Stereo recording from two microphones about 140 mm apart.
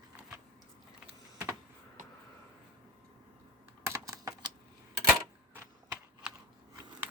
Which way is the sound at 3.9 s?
25° right (ahead or behind).